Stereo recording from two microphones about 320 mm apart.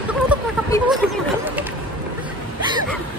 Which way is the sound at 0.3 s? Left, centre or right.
Centre.